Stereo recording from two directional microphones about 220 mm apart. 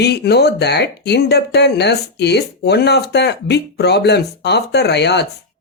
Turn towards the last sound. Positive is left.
turn(degrees=50)  # may be behind; listen again after turning